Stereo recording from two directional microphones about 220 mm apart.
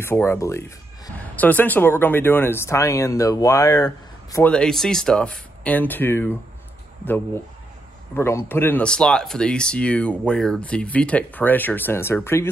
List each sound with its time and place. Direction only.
0.0 s speech: 10° left (ahead or behind)
4.5 s speech: 5° left (ahead or behind)
8.2 s speech: 10° left (ahead or behind)